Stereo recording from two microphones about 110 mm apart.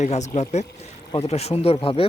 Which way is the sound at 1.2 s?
70° left (ahead or behind).